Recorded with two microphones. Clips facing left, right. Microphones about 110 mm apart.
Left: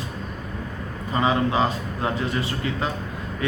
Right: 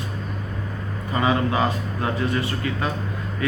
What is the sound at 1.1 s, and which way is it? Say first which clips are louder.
A man's voice: even; 25° left (ahead or behind).